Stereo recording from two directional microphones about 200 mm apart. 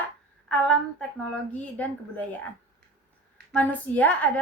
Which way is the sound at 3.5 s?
10° left (ahead or behind).